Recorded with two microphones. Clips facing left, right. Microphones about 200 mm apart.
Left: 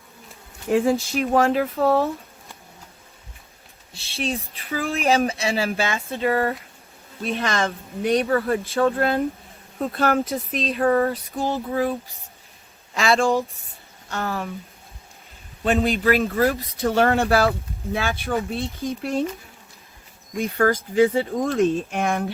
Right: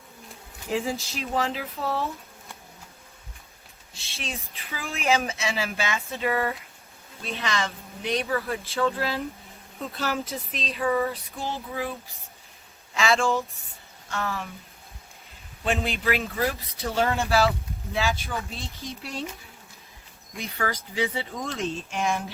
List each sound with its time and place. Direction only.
0.7 s speech: 50° left (ahead or behind)
4.1 s speech: 35° left (ahead or behind)
7.3 s speech: 50° left (ahead or behind)
12.9 s speech: 35° left (ahead or behind)
15.6 s speech: 40° left (ahead or behind)
20.4 s speech: 50° left (ahead or behind)